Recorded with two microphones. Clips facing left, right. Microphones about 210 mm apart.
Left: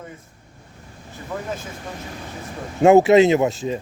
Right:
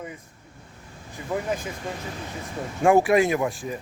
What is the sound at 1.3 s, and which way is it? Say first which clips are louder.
Speech: right 2 dB; 10° right (ahead or behind).